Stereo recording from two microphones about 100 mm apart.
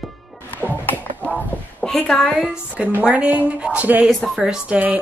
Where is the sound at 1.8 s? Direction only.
10° left (ahead or behind).